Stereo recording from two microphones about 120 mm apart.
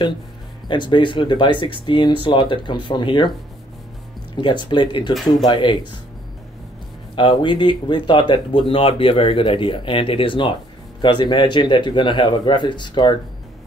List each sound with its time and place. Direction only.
0.7 s speech: 40° left (ahead or behind)
4.4 s speech: 40° left (ahead or behind)
7.2 s speech: 45° left (ahead or behind)